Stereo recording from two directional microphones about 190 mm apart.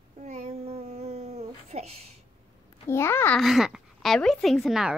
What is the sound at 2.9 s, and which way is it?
Speech, 15° left (ahead or behind).